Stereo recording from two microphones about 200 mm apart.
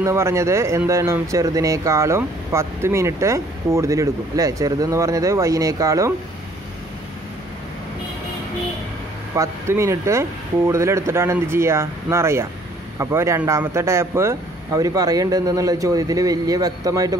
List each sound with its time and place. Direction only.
0.0 s speech: 15° right (ahead or behind)
9.3 s speech: 15° right (ahead or behind)